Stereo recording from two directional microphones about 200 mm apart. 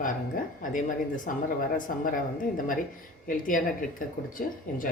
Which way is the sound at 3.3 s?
40° left (ahead or behind).